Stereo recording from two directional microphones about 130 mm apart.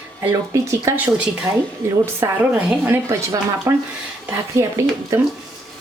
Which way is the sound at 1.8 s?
20° right (ahead or behind).